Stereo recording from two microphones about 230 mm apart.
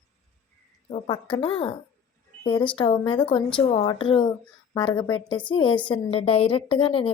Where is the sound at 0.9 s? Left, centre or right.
Left.